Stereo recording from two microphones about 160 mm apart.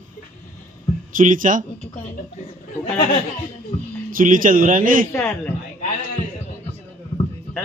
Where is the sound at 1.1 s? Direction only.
55° right (ahead or behind).